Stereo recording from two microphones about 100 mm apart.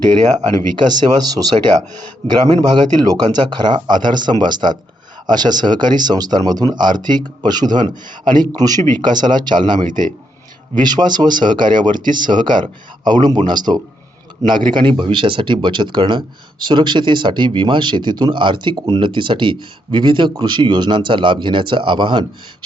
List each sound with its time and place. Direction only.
0.9 s speech: 40° right (ahead or behind)
2.6 s speech: 45° right (ahead or behind)